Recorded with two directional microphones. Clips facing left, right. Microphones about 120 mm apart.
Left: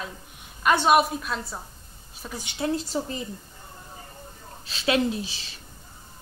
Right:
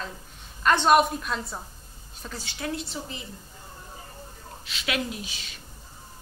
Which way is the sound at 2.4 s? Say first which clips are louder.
Left 6 dB; 25° left (ahead or behind).